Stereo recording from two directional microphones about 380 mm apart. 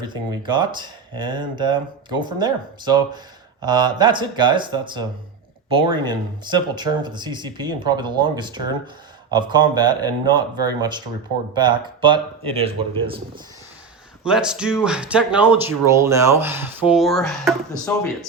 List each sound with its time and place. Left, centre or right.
0.0 s speech: centre
14.3 s speech: centre